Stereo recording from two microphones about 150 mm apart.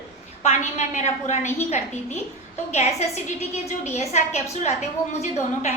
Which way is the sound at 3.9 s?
45° left (ahead or behind).